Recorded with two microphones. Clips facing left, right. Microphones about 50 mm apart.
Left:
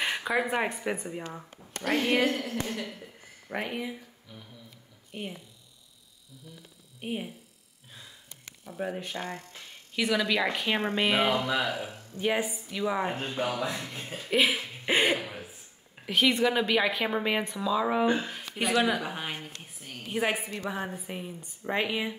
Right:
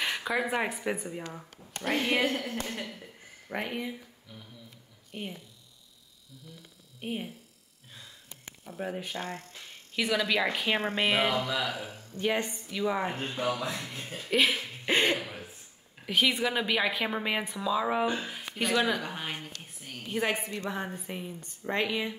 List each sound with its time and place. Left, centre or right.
0.0 s a woman's voice: centre
3.4 s a woman's voice: centre
7.0 s a woman's voice: centre
8.7 s a woman's voice: centre
11.3 s speech: left
12.2 s a woman's voice: centre
13.4 s speech: left
13.7 s a woman's voice: centre
19.6 s a sound: centre
20.7 s a woman's voice: centre